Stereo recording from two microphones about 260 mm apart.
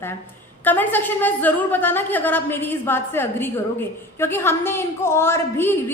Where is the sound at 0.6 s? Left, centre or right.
Centre.